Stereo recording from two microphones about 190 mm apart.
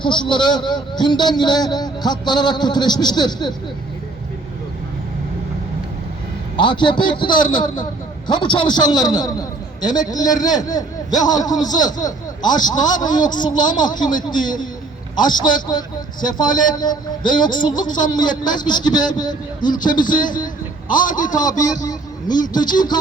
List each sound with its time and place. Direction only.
0.0 s a man's voice: 25° left (ahead or behind)
6.6 s a man's voice: 25° left (ahead or behind)
19.9 s a man's voice: 45° left (ahead or behind)
21.6 s a man's voice: 20° left (ahead or behind)